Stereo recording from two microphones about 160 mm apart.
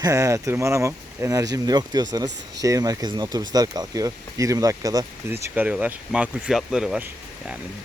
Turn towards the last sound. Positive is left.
turn(degrees=-5)  # may be behind; listen again after turning